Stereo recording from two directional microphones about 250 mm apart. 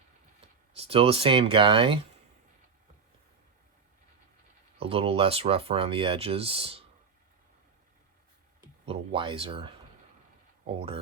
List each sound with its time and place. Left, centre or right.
0.4 s speech: right
4.8 s speech: right
8.9 s speech: right
10.8 s speech: right